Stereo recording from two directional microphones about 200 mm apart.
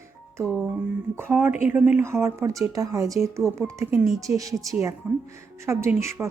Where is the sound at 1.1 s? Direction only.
10° right (ahead or behind).